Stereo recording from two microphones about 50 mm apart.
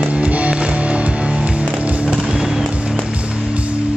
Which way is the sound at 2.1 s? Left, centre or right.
Centre.